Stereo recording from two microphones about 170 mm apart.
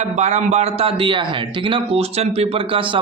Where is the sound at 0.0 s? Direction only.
45° right (ahead or behind).